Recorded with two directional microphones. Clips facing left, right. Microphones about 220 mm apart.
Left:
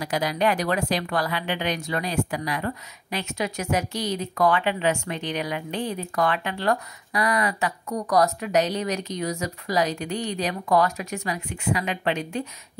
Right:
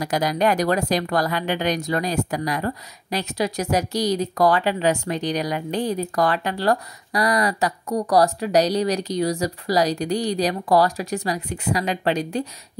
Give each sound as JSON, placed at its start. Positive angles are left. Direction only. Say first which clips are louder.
{"t": 0.0, "sound": "a woman's voice", "louder": "right 3 dB", "side_deg": -40}